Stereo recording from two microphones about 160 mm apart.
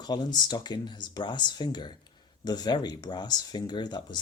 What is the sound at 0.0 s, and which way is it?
Speech, 25° left (ahead or behind).